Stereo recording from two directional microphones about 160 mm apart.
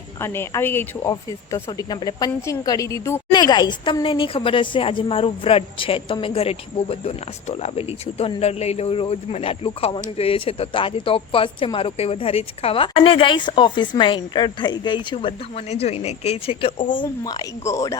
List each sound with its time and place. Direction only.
0.2 s a woman's voice: 15° left (ahead or behind)